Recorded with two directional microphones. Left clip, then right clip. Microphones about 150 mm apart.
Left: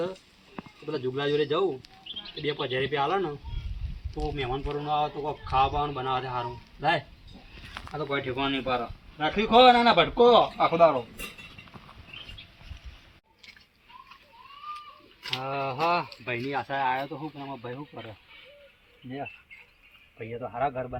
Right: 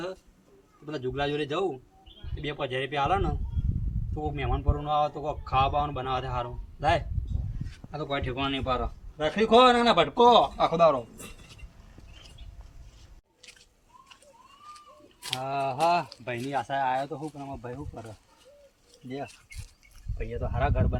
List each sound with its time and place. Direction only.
0.9 s a man's voice: 35° right (ahead or behind)
4.4 s a man's voice: 25° right (ahead or behind)
15.2 s speech: 50° right (ahead or behind)
17.4 s a man's voice: 25° right (ahead or behind)
20.6 s a man's voice: 40° right (ahead or behind)